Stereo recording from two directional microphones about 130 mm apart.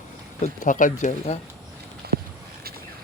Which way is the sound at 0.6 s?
85° left.